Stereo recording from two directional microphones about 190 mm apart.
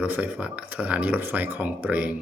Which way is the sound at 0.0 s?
10° right (ahead or behind).